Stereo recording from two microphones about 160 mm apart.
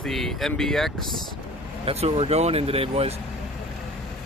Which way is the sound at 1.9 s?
40° right (ahead or behind).